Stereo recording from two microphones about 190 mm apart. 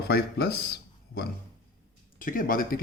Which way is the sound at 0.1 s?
60° left (ahead or behind).